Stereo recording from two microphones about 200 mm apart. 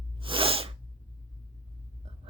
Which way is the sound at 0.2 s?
25° right (ahead or behind).